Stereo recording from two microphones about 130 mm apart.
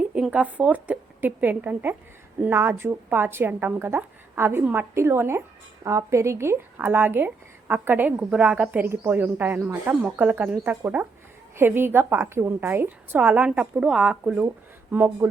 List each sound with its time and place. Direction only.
0.1 s a woman's voice: 10° right (ahead or behind)